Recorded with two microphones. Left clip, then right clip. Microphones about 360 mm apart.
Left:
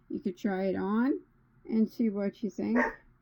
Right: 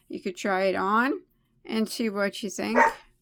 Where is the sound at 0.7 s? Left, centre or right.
Right.